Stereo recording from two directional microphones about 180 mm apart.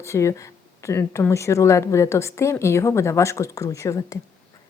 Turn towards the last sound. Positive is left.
turn(degrees=15)  # may be behind; listen again after turning